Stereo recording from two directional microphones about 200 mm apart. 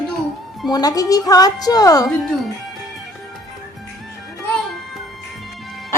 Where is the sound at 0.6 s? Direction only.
20° left (ahead or behind).